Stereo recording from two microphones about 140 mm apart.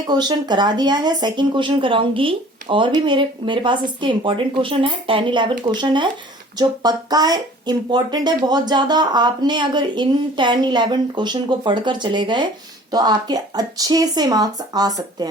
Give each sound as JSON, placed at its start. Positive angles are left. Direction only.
{"t": 0.1, "sound": "speech", "side_deg": -30}